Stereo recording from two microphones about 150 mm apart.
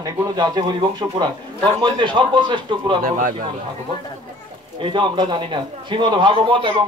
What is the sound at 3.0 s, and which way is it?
Speech, 65° right (ahead or behind).